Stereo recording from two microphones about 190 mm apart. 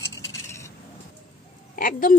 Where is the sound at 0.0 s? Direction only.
15° left (ahead or behind).